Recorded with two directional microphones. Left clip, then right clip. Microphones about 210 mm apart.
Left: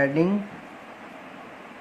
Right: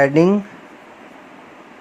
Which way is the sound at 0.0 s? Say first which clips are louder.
Right 9 dB; 45° right (ahead or behind).